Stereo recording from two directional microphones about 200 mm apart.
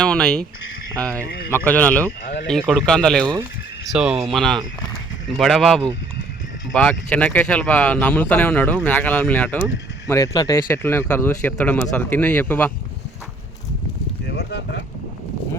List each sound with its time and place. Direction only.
0.0 s speech: 5° left (ahead or behind)
2.2 s speech: 45° left (ahead or behind)
2.5 s speech: centre (ahead or behind)
14.3 s speech: 60° left (ahead or behind)